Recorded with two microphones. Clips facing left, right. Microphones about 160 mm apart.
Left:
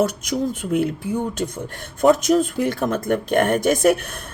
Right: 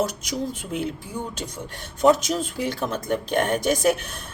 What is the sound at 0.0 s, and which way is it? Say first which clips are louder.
Speech: left 5 dB; 55° left (ahead or behind).